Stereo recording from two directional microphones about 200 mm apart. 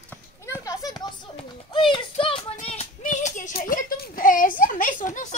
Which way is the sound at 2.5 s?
30° left (ahead or behind).